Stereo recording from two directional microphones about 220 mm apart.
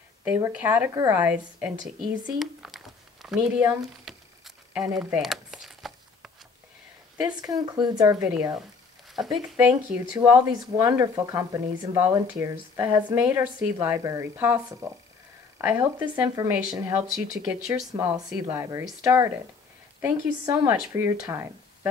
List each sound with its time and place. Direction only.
0.2 s speech: 5° right (ahead or behind)
4.7 s a sound: 5° right (ahead or behind)
7.2 s speech: 20° right (ahead or behind)
9.1 s speech: centre (ahead or behind)
10.8 s speech: 10° right (ahead or behind)
17.6 s speech: 15° right (ahead or behind)